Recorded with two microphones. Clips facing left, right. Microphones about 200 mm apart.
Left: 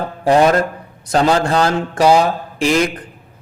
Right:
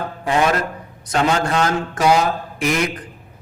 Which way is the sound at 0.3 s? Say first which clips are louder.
Left 6 dB; 35° left (ahead or behind).